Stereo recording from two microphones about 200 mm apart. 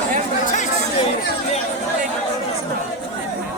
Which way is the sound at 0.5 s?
35° left (ahead or behind).